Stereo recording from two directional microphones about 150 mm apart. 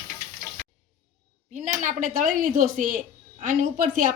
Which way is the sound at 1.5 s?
60° right (ahead or behind).